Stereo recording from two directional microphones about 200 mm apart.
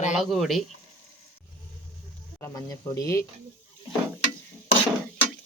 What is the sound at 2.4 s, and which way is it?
Speech, 15° left (ahead or behind).